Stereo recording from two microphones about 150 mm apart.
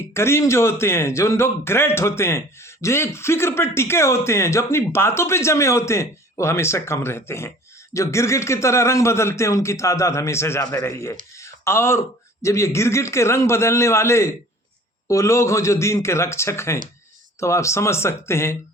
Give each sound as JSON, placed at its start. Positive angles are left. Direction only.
{"t": 0.1, "sound": "a man's voice", "side_deg": 15}